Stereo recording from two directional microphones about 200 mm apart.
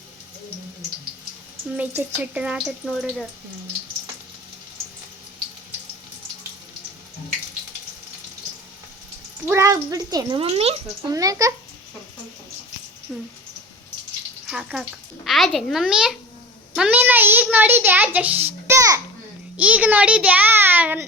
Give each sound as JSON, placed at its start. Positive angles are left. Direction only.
{"t": 2.0, "sound": "speech", "side_deg": -10}
{"t": 9.5, "sound": "a child's voice", "side_deg": -15}
{"t": 10.4, "sound": "speech", "side_deg": -30}
{"t": 11.1, "sound": "a child's voice", "side_deg": -15}
{"t": 13.1, "sound": "speech", "side_deg": 0}
{"t": 14.4, "sound": "a child's voice", "side_deg": -5}